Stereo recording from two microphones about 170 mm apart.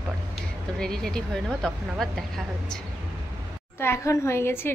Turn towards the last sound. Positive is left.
turn(degrees=15)  # may be behind; listen again after turning